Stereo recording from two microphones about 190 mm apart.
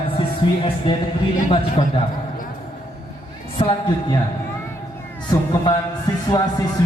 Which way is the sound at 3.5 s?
25° left (ahead or behind).